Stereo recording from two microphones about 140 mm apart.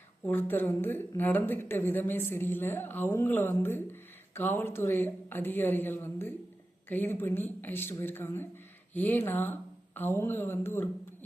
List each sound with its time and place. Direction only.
0.3 s a woman's voice: 15° left (ahead or behind)